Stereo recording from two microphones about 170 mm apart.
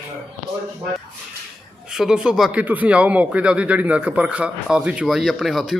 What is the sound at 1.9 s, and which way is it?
Speech, 5° right (ahead or behind).